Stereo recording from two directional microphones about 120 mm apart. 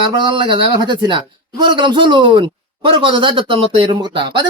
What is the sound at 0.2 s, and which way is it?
Speech, 40° right (ahead or behind).